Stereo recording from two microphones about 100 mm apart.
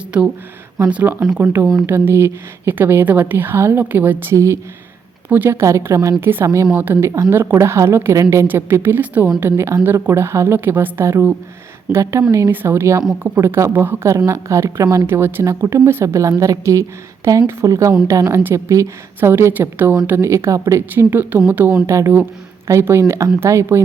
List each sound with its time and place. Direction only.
0.1 s a woman's voice: 10° right (ahead or behind); by 23.8 s 25° right (ahead or behind)